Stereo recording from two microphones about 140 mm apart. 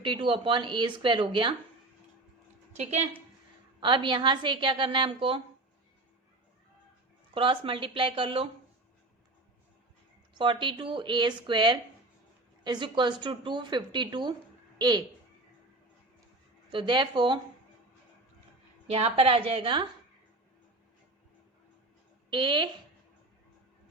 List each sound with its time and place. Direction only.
0.0 s speech: 40° right (ahead or behind)
2.7 s a woman's voice: 50° right (ahead or behind)
3.8 s speech: 35° right (ahead or behind)
7.3 s speech: 40° right (ahead or behind)
10.3 s speech: 35° right (ahead or behind)
16.7 s speech: 35° right (ahead or behind)
18.9 s a woman's voice: 45° right (ahead or behind)
22.3 s speech: 35° right (ahead or behind)